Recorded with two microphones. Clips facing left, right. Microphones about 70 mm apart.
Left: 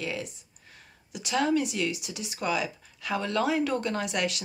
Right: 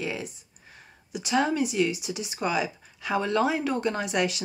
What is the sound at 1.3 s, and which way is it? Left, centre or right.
Speech, centre.